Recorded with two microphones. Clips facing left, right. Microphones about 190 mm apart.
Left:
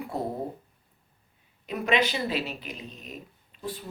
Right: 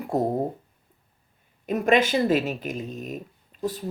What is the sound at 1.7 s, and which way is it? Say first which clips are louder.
Speech: right 5 dB; 45° right (ahead or behind).